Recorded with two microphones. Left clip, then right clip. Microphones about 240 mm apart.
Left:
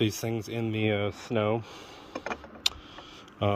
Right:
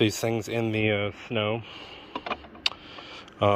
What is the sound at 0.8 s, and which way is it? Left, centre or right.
Speech, centre.